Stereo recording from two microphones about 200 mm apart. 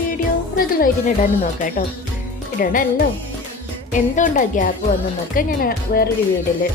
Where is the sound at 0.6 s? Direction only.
45° left (ahead or behind).